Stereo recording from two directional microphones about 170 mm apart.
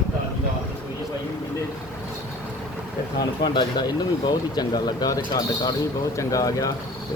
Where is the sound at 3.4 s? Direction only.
25° left (ahead or behind).